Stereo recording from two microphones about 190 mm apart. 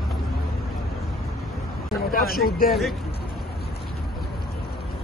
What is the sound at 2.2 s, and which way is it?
Speech, 50° left (ahead or behind).